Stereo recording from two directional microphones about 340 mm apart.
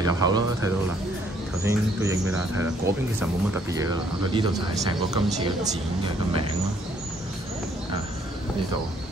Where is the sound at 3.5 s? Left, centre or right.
Centre.